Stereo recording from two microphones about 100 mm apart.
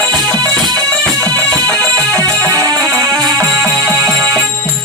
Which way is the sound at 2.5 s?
40° right (ahead or behind).